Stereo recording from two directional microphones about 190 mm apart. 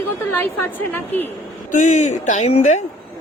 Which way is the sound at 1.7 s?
40° left (ahead or behind).